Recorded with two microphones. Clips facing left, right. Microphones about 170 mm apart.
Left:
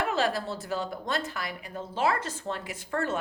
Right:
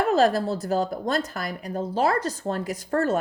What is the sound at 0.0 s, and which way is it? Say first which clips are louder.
Speech: right 8 dB; 40° right (ahead or behind).